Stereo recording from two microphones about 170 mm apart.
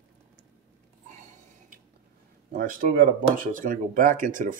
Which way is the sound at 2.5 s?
55° right (ahead or behind).